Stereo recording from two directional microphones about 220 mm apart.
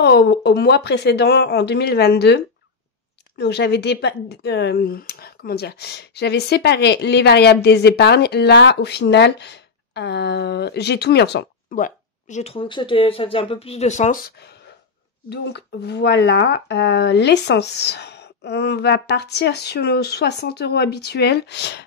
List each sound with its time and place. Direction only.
0.0 s speech: 50° left (ahead or behind); by 14.3 s 30° left (ahead or behind)
15.2 s speech: 50° left (ahead or behind)